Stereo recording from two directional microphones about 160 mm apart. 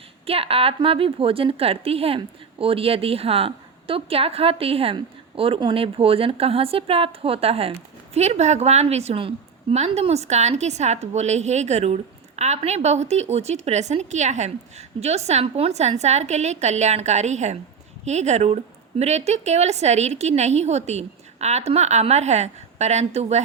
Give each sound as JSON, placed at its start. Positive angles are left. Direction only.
{"t": 0.3, "sound": "a woman's voice", "side_deg": -35}